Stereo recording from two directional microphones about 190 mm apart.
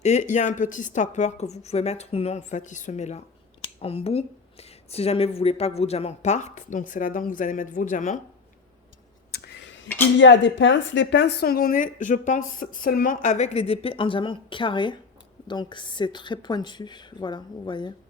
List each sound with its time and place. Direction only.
0.0 s a woman's voice: 35° left (ahead or behind)
9.3 s a sound: 60° left (ahead or behind)
10.2 s a woman's voice: 70° left (ahead or behind); by 17.9 s 25° left (ahead or behind)